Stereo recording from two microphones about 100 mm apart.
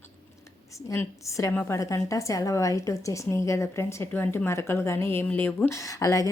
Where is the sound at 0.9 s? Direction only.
30° left (ahead or behind).